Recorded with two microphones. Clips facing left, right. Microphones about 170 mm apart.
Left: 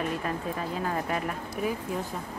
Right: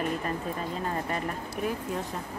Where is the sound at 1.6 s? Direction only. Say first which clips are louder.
Left 1 dB; centre (ahead or behind).